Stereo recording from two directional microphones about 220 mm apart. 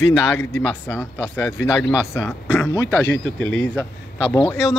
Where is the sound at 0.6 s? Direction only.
10° left (ahead or behind).